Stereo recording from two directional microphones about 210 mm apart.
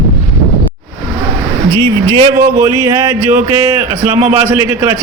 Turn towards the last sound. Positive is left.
turn(degrees=-10)  # may be behind; listen again after turning